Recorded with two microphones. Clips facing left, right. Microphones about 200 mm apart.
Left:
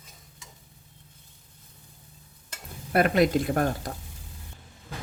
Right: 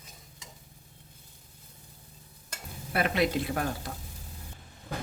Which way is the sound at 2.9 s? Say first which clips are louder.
Left 6 dB; 50° left (ahead or behind).